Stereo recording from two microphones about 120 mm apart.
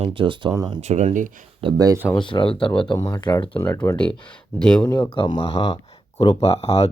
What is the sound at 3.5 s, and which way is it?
Speech, 20° left (ahead or behind).